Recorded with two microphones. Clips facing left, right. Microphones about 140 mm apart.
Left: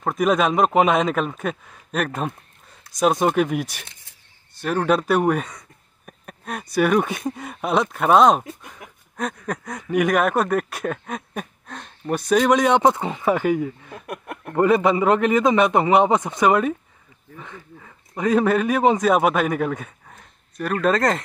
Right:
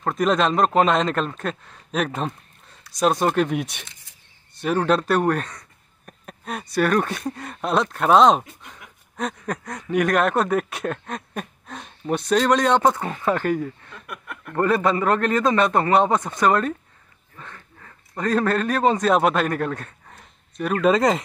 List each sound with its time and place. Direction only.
0.0 s a man's voice: 10° left (ahead or behind)
13.9 s speech: 40° left (ahead or behind)
14.5 s a man's voice: 15° left (ahead or behind); by 21.2 s centre (ahead or behind)